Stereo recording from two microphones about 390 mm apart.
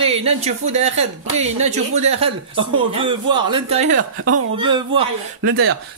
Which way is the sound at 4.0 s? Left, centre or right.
Right.